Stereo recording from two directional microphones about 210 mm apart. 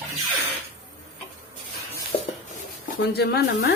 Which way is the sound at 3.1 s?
50° left (ahead or behind).